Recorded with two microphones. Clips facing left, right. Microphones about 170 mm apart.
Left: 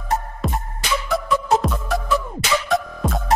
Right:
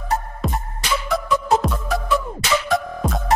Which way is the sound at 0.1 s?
Centre (ahead or behind).